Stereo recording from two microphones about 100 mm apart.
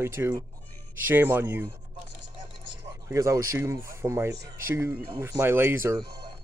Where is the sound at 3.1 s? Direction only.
30° right (ahead or behind).